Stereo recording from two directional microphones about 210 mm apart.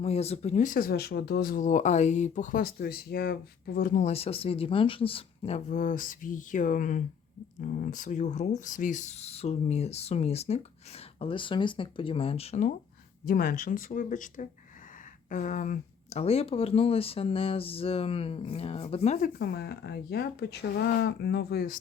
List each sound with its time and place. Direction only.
0.0 s speech: 30° left (ahead or behind); by 4.0 s 45° left (ahead or behind)
4.0 s speech: 30° left (ahead or behind)
13.2 s speech: 45° left (ahead or behind); by 19.2 s 30° left (ahead or behind)
19.2 s speech: 50° left (ahead or behind)